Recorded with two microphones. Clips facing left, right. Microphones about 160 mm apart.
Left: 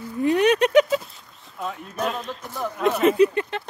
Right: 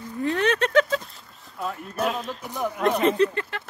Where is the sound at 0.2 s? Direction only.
15° left (ahead or behind).